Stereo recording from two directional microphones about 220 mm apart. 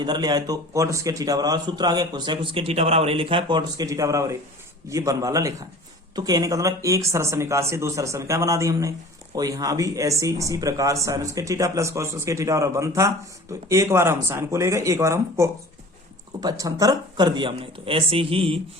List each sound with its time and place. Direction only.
0.0 s a man's voice: 20° right (ahead or behind)